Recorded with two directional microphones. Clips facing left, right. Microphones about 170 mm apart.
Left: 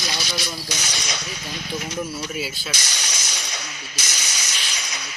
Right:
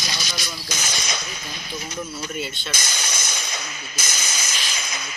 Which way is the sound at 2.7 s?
50° right (ahead or behind).